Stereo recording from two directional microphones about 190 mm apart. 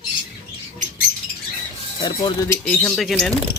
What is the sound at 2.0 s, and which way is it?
Speech, 20° left (ahead or behind).